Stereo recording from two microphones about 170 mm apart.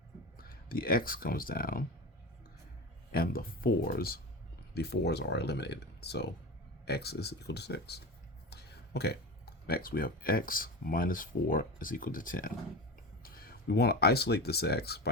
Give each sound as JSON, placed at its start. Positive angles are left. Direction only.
{"t": 0.3, "sound": "speech", "side_deg": 60}
{"t": 3.1, "sound": "speech", "side_deg": 60}